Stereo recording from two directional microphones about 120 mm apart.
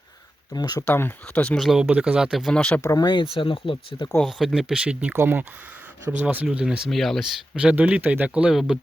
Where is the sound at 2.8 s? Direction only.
30° left (ahead or behind).